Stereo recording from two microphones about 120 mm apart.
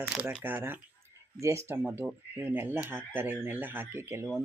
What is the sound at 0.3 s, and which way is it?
Speech, 15° right (ahead or behind).